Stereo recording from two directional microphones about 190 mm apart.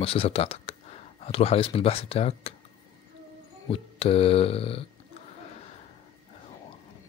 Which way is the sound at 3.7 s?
30° left (ahead or behind).